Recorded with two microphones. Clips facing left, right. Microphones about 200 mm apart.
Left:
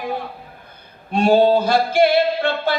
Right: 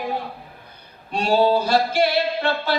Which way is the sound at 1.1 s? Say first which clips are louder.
Left 4 dB; 50° left (ahead or behind).